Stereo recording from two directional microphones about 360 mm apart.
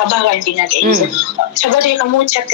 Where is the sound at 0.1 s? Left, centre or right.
Left.